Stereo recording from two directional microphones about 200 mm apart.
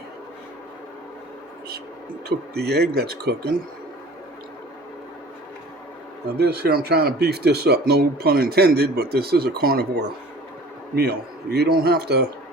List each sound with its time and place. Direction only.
2.6 s speech: 55° right (ahead or behind)
6.3 s a man's voice: 55° right (ahead or behind)